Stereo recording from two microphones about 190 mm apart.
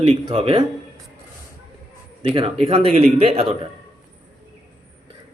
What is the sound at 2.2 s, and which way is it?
Speech, 30° right (ahead or behind).